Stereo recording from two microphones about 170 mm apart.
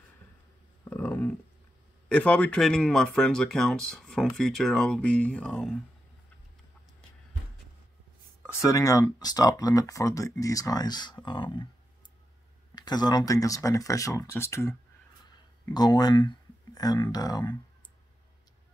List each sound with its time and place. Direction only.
0.8 s a sound: 15° left (ahead or behind)
2.0 s speech: 5° left (ahead or behind)
8.4 s speech: 20° left (ahead or behind)
12.7 s speech: 25° left (ahead or behind)